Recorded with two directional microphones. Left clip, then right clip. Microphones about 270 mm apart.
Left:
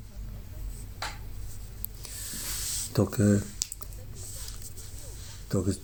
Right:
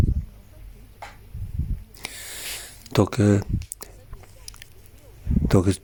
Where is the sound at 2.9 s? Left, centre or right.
Right.